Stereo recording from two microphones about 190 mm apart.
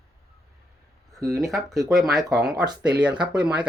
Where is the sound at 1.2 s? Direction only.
Centre (ahead or behind).